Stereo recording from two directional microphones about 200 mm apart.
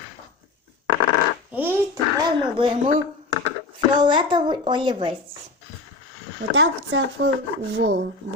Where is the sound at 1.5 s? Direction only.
10° right (ahead or behind).